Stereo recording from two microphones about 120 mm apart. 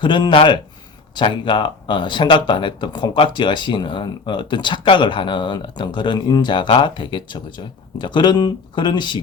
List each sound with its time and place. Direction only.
0.0 s speech: 40° left (ahead or behind)